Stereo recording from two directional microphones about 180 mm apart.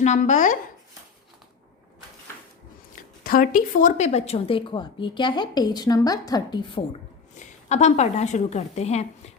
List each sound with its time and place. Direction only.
0.0 s speech: 40° left (ahead or behind)
2.9 s speech: 50° left (ahead or behind); by 6.8 s 25° left (ahead or behind)
7.3 s a woman's voice: 40° left (ahead or behind)